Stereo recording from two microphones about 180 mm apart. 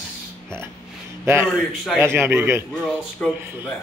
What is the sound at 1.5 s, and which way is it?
Speech, centre (ahead or behind).